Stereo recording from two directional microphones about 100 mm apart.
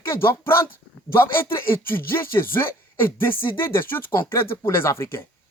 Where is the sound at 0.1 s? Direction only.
25° left (ahead or behind).